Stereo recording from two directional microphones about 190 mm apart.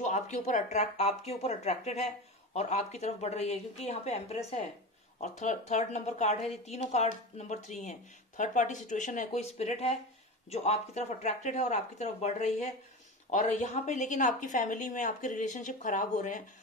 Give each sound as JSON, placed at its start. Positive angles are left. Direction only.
{"t": 0.0, "sound": "speech", "side_deg": 40}